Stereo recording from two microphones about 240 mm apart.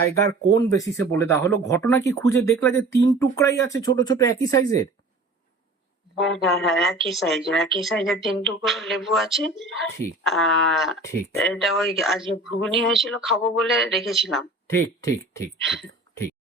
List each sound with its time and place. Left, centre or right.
0.1 s speech: centre
6.1 s speech: centre
14.7 s speech: centre